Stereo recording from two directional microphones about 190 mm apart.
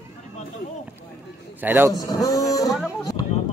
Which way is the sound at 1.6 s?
10° right (ahead or behind).